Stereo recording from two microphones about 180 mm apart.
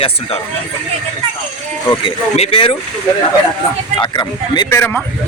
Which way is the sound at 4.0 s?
25° left (ahead or behind).